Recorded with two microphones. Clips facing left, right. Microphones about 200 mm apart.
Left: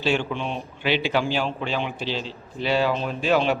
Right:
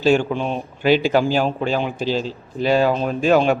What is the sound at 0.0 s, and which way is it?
Speech, 45° right (ahead or behind).